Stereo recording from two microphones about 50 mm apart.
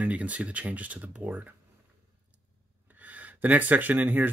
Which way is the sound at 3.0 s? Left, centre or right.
Right.